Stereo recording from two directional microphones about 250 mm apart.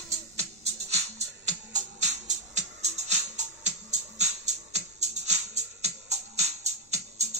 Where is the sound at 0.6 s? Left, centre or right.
Right.